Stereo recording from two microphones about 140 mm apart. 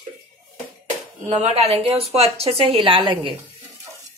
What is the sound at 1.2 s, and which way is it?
A woman's voice, 50° right (ahead or behind).